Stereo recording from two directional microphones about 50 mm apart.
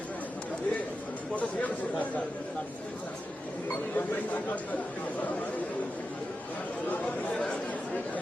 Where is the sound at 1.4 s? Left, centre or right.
Left.